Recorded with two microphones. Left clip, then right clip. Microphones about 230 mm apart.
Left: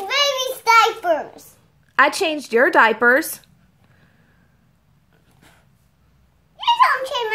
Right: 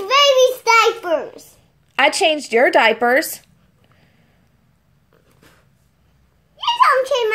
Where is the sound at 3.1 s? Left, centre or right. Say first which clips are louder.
Right 2 dB; left.